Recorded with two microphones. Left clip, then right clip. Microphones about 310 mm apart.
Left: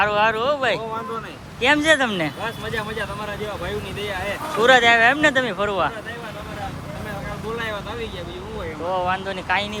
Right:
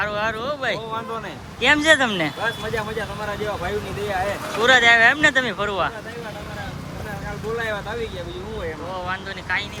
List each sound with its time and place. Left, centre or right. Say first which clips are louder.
0.0 s speech: left 5 dB; centre
4.6 s speech: even; centre
9.0 s speech: left 5 dB; centre